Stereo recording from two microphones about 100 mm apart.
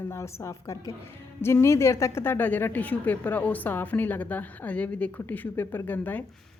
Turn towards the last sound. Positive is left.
turn(degrees=15)  # may be behind; listen again after turning